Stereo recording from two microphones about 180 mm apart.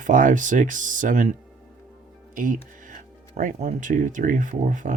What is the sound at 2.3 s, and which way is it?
Speech, 50° right (ahead or behind).